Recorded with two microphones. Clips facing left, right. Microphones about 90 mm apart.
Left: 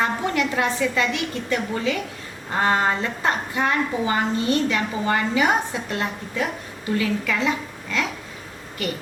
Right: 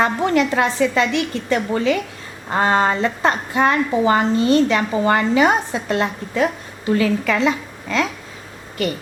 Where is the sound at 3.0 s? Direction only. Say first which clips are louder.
Right 5 dB; 75° right (ahead or behind).